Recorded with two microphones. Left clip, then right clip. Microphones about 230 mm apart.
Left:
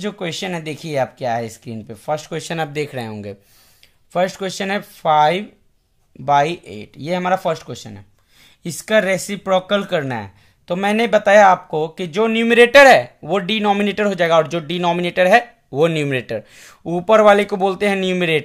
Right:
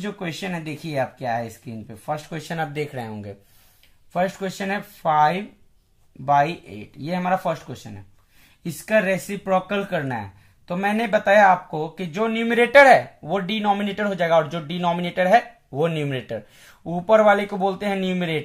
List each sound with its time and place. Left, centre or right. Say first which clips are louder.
0.0 s speech: left 5 dB; left